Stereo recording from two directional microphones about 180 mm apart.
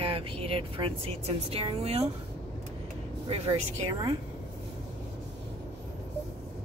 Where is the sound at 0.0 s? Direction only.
30° right (ahead or behind).